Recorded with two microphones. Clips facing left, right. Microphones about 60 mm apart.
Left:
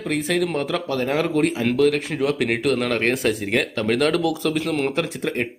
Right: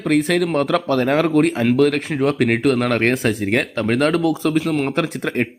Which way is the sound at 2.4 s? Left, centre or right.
Centre.